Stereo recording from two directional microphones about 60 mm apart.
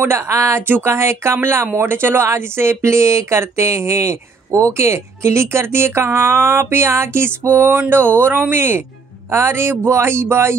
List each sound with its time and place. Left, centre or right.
0.2 s speech: right